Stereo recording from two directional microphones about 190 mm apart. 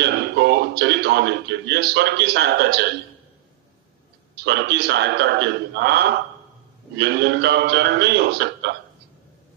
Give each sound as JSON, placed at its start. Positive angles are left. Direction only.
{"t": 0.0, "sound": "a man's voice", "side_deg": -60}
{"t": 4.4, "sound": "a man's voice", "side_deg": -60}